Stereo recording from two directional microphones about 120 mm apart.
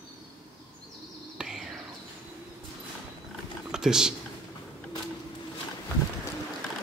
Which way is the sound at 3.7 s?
5° right (ahead or behind).